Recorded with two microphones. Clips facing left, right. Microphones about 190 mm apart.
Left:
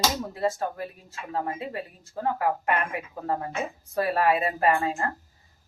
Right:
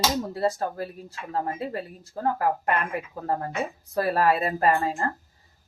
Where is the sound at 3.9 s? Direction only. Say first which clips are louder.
Right 1 dB; 40° right (ahead or behind).